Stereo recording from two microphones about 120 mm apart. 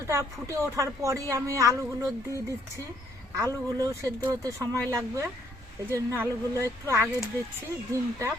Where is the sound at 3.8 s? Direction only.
25° right (ahead or behind).